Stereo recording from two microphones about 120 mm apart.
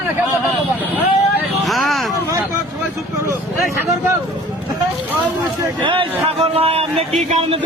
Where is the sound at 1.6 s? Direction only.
Centre (ahead or behind).